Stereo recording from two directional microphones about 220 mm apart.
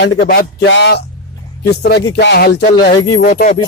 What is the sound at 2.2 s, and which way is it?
Speech, 50° left (ahead or behind).